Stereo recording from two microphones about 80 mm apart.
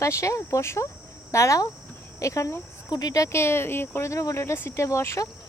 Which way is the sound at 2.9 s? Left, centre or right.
Left.